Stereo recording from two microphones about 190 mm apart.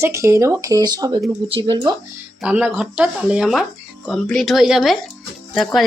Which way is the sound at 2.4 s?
5° right (ahead or behind).